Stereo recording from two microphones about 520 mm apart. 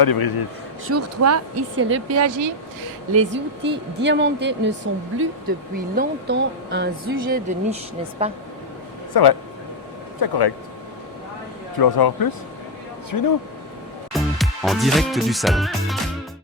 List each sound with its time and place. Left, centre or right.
0.0 s speech: left
0.9 s speech: right
5.7 s speech: centre
9.2 s speech: left
11.8 s speech: left
14.1 s music: centre